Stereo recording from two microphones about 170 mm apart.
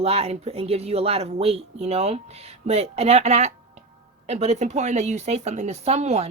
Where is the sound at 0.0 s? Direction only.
35° right (ahead or behind).